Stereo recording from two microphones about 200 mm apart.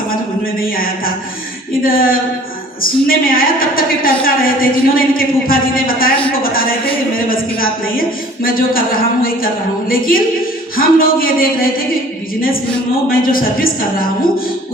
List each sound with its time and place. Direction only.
0.7 s a woman's voice: 45° left (ahead or behind)
13.1 s a woman's voice: 45° left (ahead or behind)